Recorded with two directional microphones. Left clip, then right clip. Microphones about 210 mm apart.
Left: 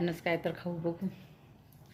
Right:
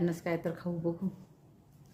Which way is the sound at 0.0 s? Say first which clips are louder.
Left 1 dB; 15° right (ahead or behind).